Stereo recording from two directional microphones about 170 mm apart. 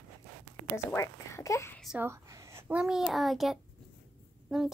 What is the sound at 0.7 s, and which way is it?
A woman's voice, 15° left (ahead or behind).